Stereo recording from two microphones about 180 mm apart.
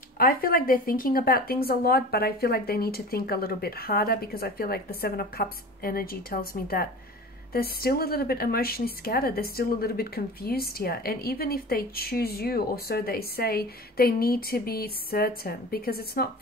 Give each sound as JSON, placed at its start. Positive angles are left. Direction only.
{"t": 0.2, "sound": "a woman's voice", "side_deg": 50}